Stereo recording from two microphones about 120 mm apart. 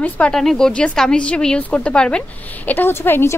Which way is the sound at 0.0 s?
10° left (ahead or behind).